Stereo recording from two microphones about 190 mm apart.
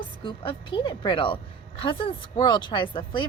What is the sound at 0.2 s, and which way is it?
Speech, 25° left (ahead or behind).